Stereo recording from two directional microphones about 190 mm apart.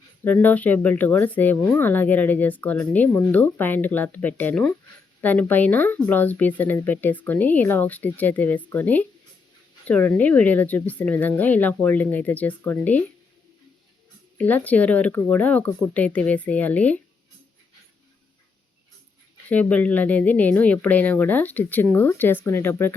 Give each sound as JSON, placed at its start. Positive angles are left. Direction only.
{"t": 0.3, "sound": "speech", "side_deg": 10}
{"t": 14.3, "sound": "speech", "side_deg": 10}
{"t": 19.5, "sound": "speech", "side_deg": 10}